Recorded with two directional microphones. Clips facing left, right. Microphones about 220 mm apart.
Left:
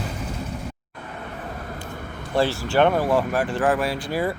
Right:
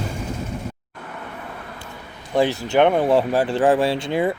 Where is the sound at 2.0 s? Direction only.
50° left (ahead or behind).